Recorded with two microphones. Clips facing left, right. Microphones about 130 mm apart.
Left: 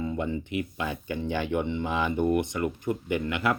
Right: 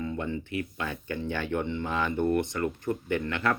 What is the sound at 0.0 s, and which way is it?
Speech, 15° left (ahead or behind).